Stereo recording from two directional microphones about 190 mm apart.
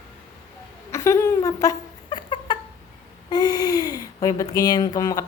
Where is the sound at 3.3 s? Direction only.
20° left (ahead or behind).